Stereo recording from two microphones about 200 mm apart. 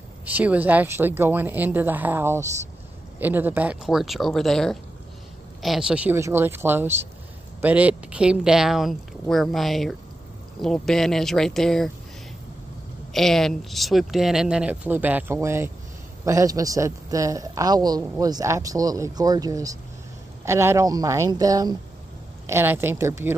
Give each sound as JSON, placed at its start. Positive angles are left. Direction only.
{"t": 0.2, "sound": "a woman's voice", "side_deg": -10}
{"t": 13.1, "sound": "a woman's voice", "side_deg": 0}